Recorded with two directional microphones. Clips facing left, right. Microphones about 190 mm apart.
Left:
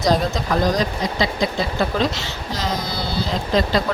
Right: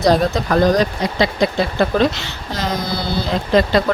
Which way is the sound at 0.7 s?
60° right (ahead or behind).